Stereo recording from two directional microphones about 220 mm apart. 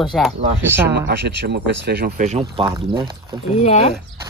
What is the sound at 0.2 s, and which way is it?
Speech, centre (ahead or behind).